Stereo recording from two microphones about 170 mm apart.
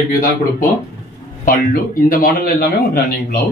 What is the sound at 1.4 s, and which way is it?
Speech, 55° left (ahead or behind).